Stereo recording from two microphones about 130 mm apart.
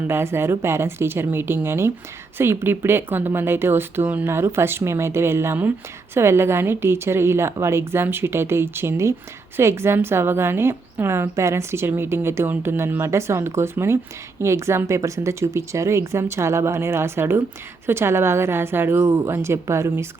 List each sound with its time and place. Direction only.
0.1 s a woman's voice: 20° right (ahead or behind)